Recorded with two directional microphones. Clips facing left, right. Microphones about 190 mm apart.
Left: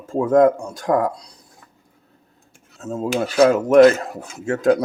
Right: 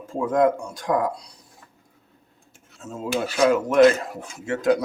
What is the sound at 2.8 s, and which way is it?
Cutlery, 40° left (ahead or behind).